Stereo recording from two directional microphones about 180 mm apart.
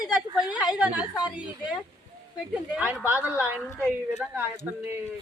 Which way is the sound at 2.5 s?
5° right (ahead or behind).